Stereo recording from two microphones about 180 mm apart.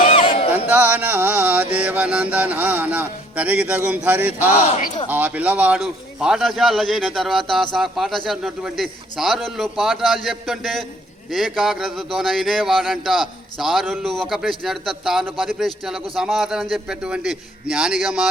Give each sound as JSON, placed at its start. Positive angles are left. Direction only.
{"t": 0.0, "sound": "a sound", "side_deg": 30}
{"t": 0.5, "sound": "music", "side_deg": -10}
{"t": 5.0, "sound": "a man's voice", "side_deg": -10}